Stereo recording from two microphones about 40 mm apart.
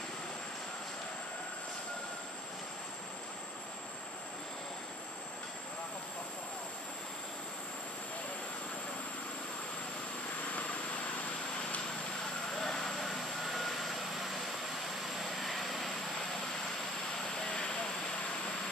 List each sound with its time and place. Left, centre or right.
12.5 s vehicle: centre
17.5 s vehicle: centre